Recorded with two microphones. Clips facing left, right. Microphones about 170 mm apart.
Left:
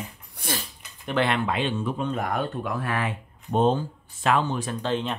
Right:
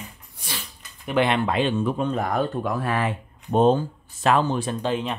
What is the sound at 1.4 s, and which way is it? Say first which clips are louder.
Speech: right 4 dB; 40° right (ahead or behind).